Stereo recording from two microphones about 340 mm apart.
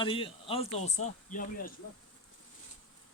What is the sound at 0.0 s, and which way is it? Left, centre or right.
Speech, centre.